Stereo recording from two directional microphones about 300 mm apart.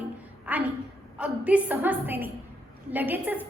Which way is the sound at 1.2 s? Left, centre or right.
Centre.